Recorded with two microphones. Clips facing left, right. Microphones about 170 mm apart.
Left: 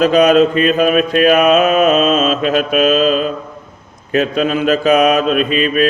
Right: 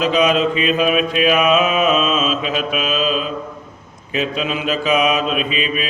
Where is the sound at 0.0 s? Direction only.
45° left (ahead or behind).